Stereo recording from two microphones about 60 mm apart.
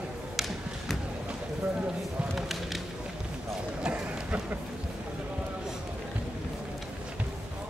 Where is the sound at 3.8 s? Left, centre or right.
Right.